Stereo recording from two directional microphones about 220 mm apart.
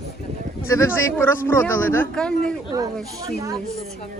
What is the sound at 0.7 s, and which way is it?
A man's voice, 10° left (ahead or behind).